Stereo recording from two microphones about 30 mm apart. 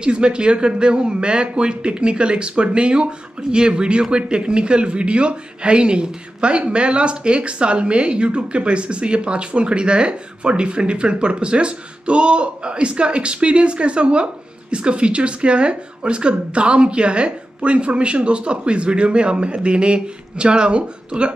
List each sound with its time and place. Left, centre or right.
0.0 s speech: right